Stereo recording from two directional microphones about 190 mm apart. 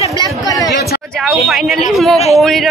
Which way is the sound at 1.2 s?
Centre (ahead or behind).